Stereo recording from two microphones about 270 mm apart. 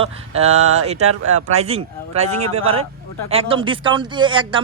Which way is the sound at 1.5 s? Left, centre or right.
Right.